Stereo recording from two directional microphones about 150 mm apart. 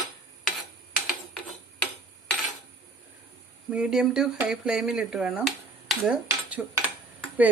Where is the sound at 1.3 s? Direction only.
5° left (ahead or behind).